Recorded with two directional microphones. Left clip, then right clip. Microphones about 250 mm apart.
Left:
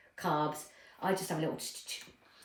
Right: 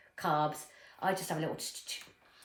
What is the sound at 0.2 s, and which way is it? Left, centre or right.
Speech, centre.